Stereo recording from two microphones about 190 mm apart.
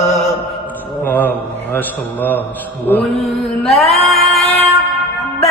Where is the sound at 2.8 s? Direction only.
5° left (ahead or behind).